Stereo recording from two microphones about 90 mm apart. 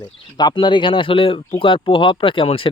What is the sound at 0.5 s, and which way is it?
Speech, 65° left (ahead or behind).